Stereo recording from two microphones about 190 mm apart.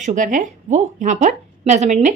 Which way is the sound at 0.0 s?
40° right (ahead or behind).